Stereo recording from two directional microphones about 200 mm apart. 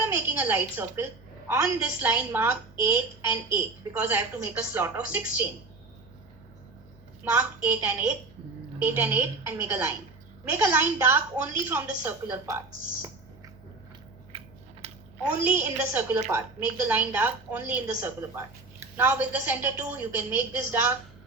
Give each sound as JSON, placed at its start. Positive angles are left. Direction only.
{"t": 0.0, "sound": "a woman's voice", "side_deg": -10}
{"t": 7.3, "sound": "a woman's voice", "side_deg": -5}
{"t": 14.3, "sound": "chewing", "side_deg": -30}
{"t": 15.5, "sound": "a woman's voice", "side_deg": -10}